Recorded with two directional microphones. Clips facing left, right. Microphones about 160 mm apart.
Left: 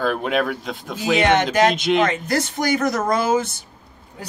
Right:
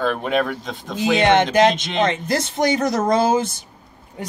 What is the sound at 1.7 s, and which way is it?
Speech, 5° left (ahead or behind).